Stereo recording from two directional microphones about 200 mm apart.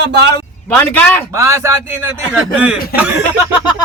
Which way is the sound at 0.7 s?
5° left (ahead or behind).